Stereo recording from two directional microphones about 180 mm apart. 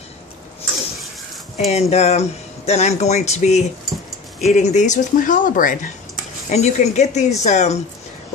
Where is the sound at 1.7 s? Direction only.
35° left (ahead or behind).